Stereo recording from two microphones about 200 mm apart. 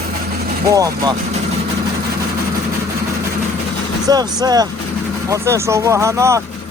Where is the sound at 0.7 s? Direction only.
15° right (ahead or behind).